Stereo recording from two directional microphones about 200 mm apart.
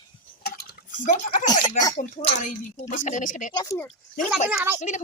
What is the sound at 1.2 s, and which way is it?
Speech, 40° left (ahead or behind).